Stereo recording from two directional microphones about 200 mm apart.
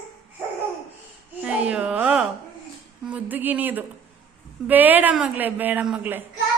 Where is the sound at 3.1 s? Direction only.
10° right (ahead or behind).